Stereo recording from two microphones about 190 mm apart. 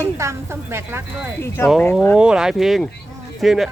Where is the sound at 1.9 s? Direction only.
5° left (ahead or behind).